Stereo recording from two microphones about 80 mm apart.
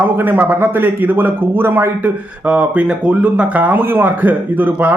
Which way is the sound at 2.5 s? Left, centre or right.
Centre.